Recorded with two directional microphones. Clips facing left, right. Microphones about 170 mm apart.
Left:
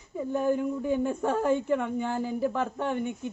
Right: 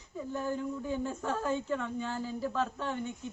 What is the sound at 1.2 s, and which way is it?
Speech, 60° left (ahead or behind).